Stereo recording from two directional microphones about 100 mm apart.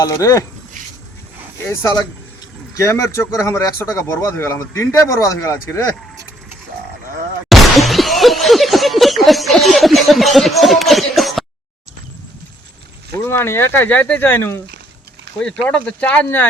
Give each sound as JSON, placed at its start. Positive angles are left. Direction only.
{"t": 0.0, "sound": "speech", "side_deg": 35}
{"t": 1.6, "sound": "speech", "side_deg": 25}
{"t": 7.5, "sound": "a sound", "side_deg": 0}
{"t": 13.1, "sound": "speech", "side_deg": 25}
{"t": 15.6, "sound": "speech", "side_deg": 10}